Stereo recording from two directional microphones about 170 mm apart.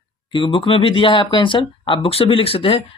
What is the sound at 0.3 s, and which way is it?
Speech, 30° left (ahead or behind).